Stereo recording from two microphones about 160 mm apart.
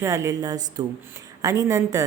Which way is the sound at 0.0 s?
20° right (ahead or behind).